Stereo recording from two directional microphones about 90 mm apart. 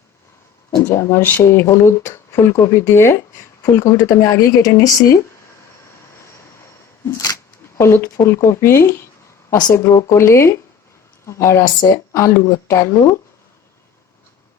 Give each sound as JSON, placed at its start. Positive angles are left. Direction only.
{"t": 0.8, "sound": "speech", "side_deg": 30}
{"t": 7.0, "sound": "a sound", "side_deg": 40}
{"t": 7.8, "sound": "speech", "side_deg": 30}